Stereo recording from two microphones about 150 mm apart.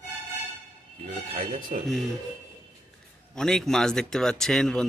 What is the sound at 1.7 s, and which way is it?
Speech, 60° right (ahead or behind).